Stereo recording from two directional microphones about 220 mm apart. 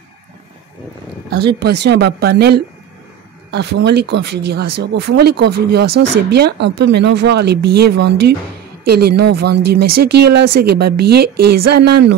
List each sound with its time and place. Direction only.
1.3 s speech: 50° right (ahead or behind)